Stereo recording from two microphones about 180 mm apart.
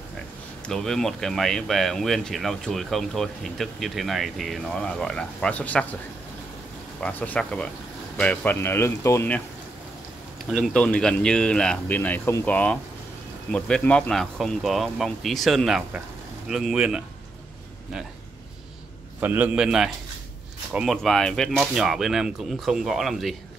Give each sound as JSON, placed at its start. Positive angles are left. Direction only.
{"t": 0.7, "sound": "speech", "side_deg": 0}
{"t": 7.0, "sound": "speech", "side_deg": 10}
{"t": 10.5, "sound": "speech", "side_deg": 5}
{"t": 19.1, "sound": "a man's voice", "side_deg": -10}